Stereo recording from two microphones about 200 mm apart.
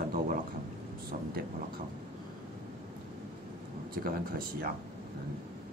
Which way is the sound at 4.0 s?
50° right (ahead or behind).